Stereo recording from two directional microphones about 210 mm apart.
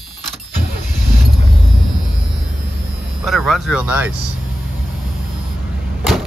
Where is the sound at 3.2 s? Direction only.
Centre (ahead or behind).